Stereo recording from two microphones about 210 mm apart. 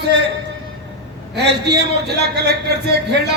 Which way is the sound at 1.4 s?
55° right (ahead or behind).